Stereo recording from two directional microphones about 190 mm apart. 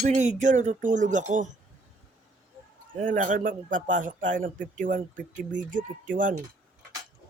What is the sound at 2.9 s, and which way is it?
Speech, 40° right (ahead or behind).